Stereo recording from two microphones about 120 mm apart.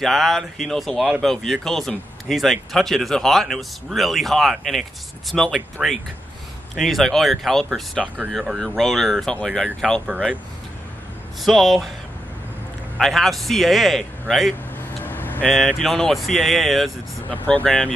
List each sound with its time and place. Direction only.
0.0 s speech: centre (ahead or behind)
11.4 s speech: centre (ahead or behind)
12.9 s speech: centre (ahead or behind)
15.0 s vehicle: 15° left (ahead or behind)
15.5 s speech: centre (ahead or behind)
17.3 s speech: 10° left (ahead or behind)